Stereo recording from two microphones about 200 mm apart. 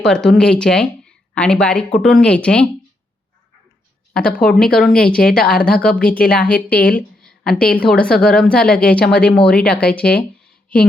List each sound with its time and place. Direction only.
0.0 s a woman's voice: 5° left (ahead or behind)
4.3 s a woman's voice: 5° left (ahead or behind)
5.4 s speech: 50° left (ahead or behind)
5.6 s a woman's voice: 5° left (ahead or behind)